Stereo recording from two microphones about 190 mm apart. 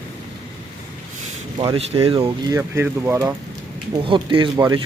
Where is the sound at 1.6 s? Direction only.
25° right (ahead or behind).